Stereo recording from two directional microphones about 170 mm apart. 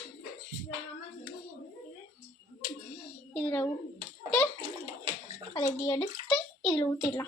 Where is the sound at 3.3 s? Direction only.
10° left (ahead or behind).